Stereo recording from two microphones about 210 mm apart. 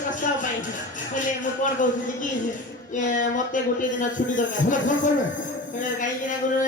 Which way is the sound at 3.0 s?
35° left (ahead or behind).